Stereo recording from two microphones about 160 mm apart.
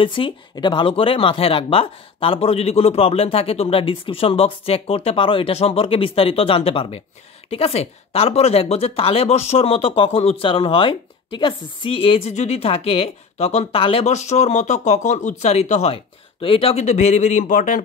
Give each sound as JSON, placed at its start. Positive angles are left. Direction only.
{"t": 0.0, "sound": "speech", "side_deg": 30}